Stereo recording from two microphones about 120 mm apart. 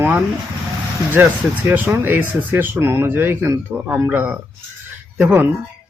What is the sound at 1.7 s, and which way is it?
Speech, 15° right (ahead or behind).